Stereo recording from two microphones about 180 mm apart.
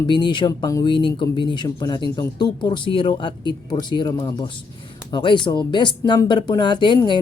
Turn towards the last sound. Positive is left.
turn(degrees=25)  # may be behind; listen again after turning